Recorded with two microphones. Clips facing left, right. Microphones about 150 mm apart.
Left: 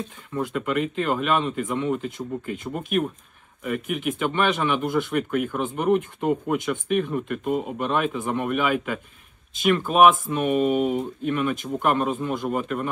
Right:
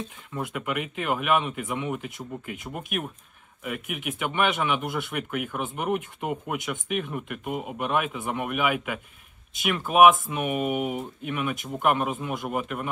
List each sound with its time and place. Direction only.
0.3 s speech: 5° right (ahead or behind)